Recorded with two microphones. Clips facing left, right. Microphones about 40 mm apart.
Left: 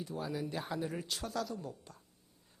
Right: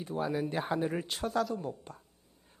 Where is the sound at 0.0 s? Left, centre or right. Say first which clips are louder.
Right 6 dB; right.